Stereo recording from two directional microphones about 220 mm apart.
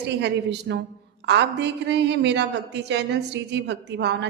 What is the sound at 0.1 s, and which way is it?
Speech, 50° right (ahead or behind).